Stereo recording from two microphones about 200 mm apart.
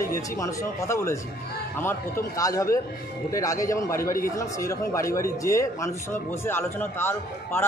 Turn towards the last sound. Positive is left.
turn(degrees=10)  # may be behind; listen again after turning